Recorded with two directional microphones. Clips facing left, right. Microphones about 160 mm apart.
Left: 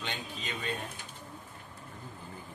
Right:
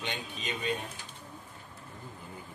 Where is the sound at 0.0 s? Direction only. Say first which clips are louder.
Right 2 dB; 20° right (ahead or behind).